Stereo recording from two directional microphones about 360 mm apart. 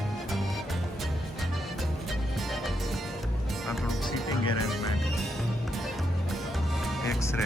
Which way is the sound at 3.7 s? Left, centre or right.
Centre.